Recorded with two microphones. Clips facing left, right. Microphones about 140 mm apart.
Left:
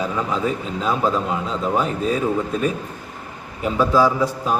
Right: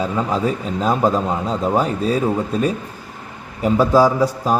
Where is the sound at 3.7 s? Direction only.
40° right (ahead or behind).